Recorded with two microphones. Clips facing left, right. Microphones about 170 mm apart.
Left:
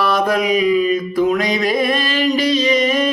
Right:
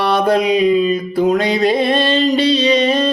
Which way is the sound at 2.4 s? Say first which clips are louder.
Right 2 dB; 30° right (ahead or behind).